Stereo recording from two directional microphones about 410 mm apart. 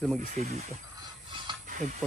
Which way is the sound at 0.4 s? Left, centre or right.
Centre.